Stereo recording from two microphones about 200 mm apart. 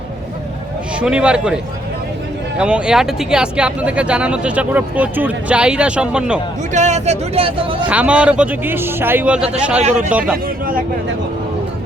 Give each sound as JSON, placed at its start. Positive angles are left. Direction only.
{"t": 0.9, "sound": "speech", "side_deg": -5}
{"t": 2.6, "sound": "speech", "side_deg": -5}
{"t": 6.7, "sound": "speech", "side_deg": -35}
{"t": 7.9, "sound": "speech", "side_deg": -5}